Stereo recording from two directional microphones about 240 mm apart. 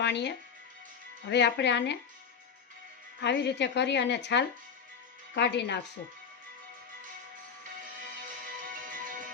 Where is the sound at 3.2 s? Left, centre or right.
Left.